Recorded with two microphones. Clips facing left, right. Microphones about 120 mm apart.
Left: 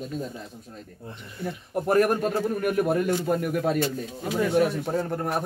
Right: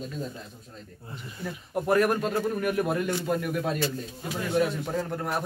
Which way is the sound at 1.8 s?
45° left (ahead or behind).